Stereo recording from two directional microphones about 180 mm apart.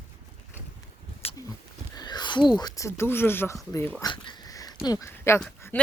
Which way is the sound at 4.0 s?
25° left (ahead or behind).